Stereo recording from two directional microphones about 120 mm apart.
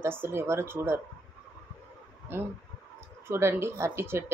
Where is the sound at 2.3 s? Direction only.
15° right (ahead or behind).